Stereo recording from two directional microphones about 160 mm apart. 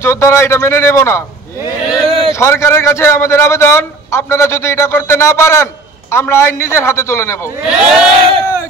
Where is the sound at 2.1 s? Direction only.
35° right (ahead or behind).